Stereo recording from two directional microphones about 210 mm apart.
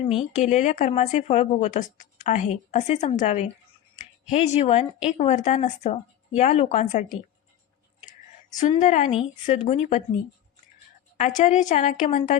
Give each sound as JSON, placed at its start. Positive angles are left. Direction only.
{"t": 0.1, "sound": "a woman's voice", "side_deg": 30}
{"t": 8.5, "sound": "a woman's voice", "side_deg": 35}
{"t": 11.3, "sound": "a woman's voice", "side_deg": 35}